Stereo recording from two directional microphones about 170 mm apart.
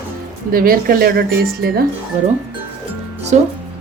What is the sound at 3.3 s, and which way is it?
Speech, 40° right (ahead or behind).